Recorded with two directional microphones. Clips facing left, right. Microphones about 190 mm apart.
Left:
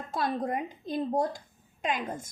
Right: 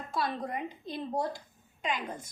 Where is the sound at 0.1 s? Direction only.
45° left (ahead or behind).